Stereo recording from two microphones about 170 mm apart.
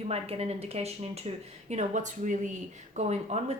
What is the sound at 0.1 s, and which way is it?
Speech, 35° right (ahead or behind).